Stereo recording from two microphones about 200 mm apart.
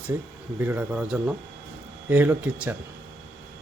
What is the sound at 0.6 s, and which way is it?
Speech, 10° right (ahead or behind).